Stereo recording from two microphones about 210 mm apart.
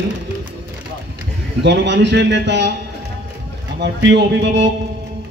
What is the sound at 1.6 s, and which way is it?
A man's voice, 55° right (ahead or behind).